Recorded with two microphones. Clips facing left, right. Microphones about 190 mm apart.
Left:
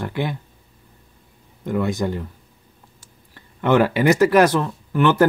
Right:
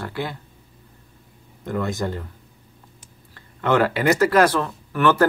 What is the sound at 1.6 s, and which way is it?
Speech, 15° left (ahead or behind).